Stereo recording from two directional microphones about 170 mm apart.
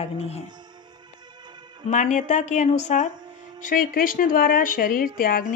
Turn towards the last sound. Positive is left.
turn(degrees=60)  # may be behind; listen again after turning